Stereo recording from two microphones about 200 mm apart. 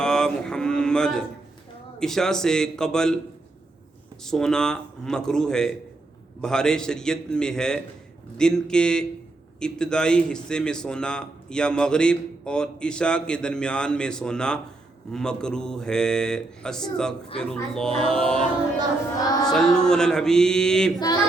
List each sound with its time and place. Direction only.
0.0 s mantra: 5° left (ahead or behind)
2.0 s a man's voice: centre (ahead or behind)
4.2 s a man's voice: centre (ahead or behind)
19.2 s a sound: 20° left (ahead or behind)
19.5 s a man's voice: 5° left (ahead or behind)